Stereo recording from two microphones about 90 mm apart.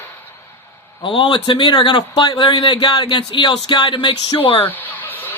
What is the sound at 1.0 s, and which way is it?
Speech, 65° left (ahead or behind).